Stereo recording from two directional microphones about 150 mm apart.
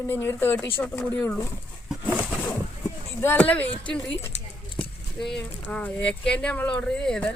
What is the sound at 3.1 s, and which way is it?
Speech, 15° left (ahead or behind).